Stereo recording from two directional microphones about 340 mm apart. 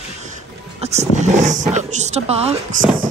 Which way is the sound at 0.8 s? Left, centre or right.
Centre.